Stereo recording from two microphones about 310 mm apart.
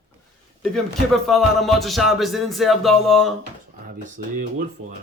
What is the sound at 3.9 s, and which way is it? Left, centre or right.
Speech, right.